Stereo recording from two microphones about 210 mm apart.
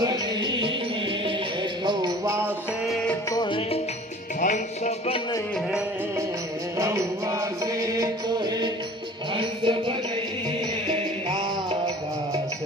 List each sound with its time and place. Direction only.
0.0 s music: 20° right (ahead or behind)
1.8 s music: 20° right (ahead or behind)
2.8 s music: 5° left (ahead or behind)
3.3 s music: 25° left (ahead or behind)
4.4 s music: 35° left (ahead or behind)
6.7 s music: 15° right (ahead or behind)